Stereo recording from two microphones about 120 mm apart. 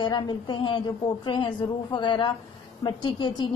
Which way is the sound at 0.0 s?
40° left (ahead or behind).